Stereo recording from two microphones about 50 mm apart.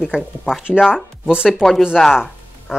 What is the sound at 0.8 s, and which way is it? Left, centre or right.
Speech, right.